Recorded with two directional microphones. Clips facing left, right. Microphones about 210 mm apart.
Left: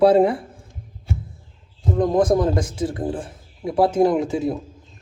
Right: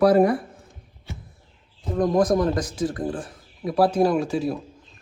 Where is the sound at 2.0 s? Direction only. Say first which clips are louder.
Left 2 dB; 25° left (ahead or behind).